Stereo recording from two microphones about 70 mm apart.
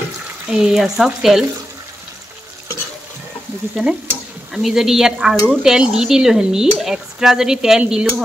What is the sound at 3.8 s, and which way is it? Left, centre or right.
Stir, right.